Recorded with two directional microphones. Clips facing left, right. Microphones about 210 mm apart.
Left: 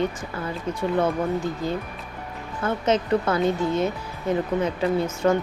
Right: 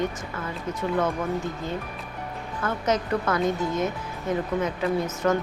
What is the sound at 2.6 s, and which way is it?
Speech, 25° left (ahead or behind).